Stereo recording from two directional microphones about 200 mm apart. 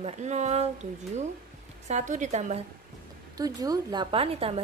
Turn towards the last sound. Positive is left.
turn(degrees=-30)  # may be behind; listen again after turning